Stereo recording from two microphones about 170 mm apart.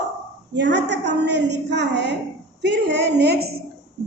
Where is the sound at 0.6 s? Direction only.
90° right.